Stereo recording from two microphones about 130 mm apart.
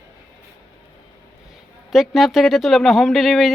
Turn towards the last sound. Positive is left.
turn(degrees=0)  # may be behind; listen again after turning